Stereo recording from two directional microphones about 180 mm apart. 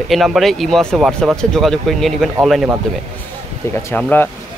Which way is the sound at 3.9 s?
10° left (ahead or behind).